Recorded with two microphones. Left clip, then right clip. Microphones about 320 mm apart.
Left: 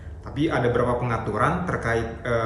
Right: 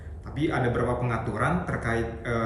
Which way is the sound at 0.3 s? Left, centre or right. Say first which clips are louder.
Left 4 dB; centre.